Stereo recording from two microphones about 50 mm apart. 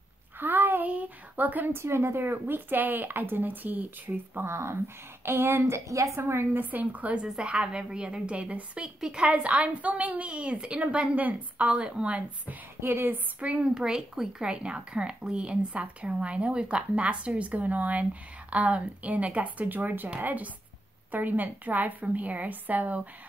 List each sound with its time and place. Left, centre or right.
0.4 s a sound: right
1.8 s a woman's voice: right
4.4 s a woman's voice: right
6.5 s a woman's voice: right
7.3 s a woman's voice: centre
12.8 s a woman's voice: right
13.4 s a woman's voice: right
13.7 s a woman's voice: centre; by 23.0 s right